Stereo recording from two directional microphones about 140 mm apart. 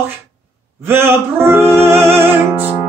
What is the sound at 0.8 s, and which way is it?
Speech, 15° right (ahead or behind).